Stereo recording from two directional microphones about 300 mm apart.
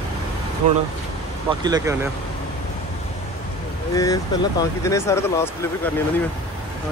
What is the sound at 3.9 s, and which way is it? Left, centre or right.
Speech, centre.